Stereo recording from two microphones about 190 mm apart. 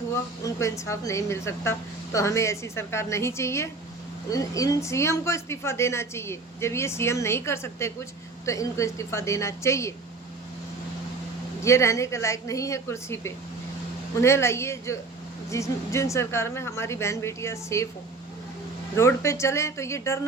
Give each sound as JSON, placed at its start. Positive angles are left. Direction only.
{"t": 0.4, "sound": "a woman's voice", "side_deg": 15}
{"t": 11.6, "sound": "a woman's voice", "side_deg": 15}
{"t": 18.9, "sound": "a woman's voice", "side_deg": 15}